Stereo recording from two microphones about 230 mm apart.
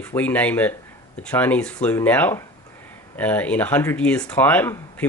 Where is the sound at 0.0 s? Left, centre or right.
Centre.